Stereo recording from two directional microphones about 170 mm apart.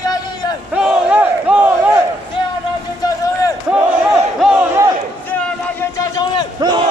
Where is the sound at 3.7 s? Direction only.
5° right (ahead or behind).